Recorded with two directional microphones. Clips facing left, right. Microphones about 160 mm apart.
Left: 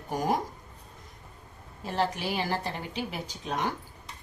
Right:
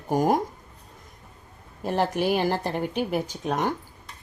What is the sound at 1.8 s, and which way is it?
A woman's voice, 55° right (ahead or behind).